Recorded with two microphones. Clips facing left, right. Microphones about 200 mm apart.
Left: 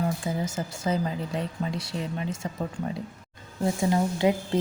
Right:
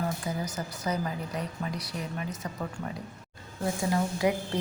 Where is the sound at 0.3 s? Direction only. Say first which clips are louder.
Left 4 dB; 25° left (ahead or behind).